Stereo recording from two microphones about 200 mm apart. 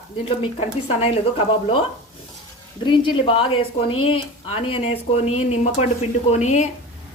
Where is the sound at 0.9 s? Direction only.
30° left (ahead or behind).